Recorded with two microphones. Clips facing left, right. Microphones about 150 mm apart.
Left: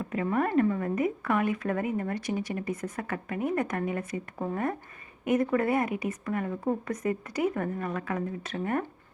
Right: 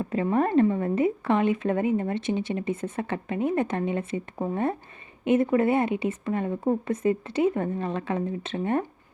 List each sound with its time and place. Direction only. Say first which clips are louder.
0.0 s a woman's voice: right 4 dB; 30° right (ahead or behind)